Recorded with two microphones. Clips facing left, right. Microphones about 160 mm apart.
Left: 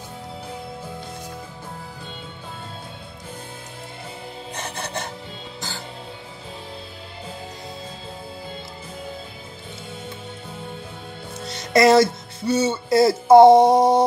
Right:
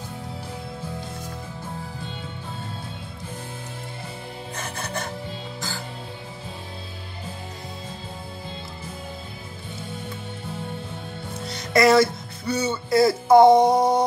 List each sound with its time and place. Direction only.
4.6 s music: 20° left (ahead or behind)
11.7 s speech: 20° left (ahead or behind)